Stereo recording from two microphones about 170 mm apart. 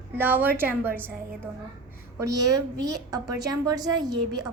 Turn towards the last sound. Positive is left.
turn(degrees=-25)  # may be behind; listen again after turning